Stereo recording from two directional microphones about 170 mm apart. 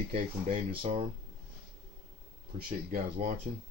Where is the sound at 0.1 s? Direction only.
35° right (ahead or behind).